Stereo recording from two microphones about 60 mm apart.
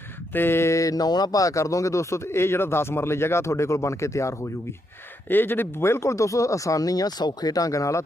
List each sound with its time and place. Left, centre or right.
0.3 s speech: left
5.3 s speech: left